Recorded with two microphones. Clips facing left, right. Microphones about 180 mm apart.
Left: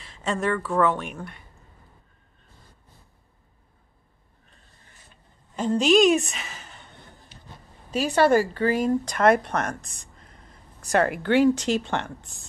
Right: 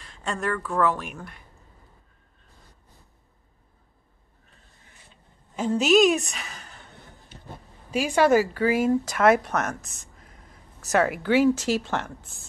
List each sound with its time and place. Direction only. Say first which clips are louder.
0.0 s speech: left 3 dB; centre (ahead or behind)
5.6 s a woman's voice: even; 5° right (ahead or behind)
7.3 s a sound: right 3 dB; 50° right (ahead or behind)
7.9 s speech: even; 10° right (ahead or behind)